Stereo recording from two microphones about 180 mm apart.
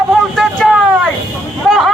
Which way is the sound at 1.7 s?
Centre (ahead or behind).